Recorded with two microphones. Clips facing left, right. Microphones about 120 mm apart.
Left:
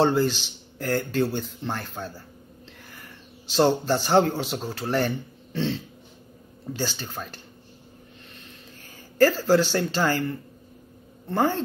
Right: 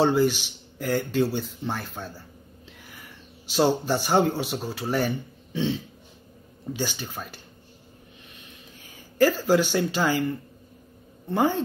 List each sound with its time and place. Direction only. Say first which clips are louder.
0.0 s speech: even; 10° right (ahead or behind)
3.5 s speech: left 1 dB; 10° right (ahead or behind)
9.2 s speech: left 1 dB; 10° right (ahead or behind)
11.2 s speech: even; 10° right (ahead or behind)